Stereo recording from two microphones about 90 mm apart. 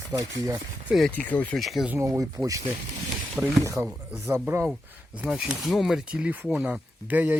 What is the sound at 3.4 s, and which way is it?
Speech, 15° right (ahead or behind).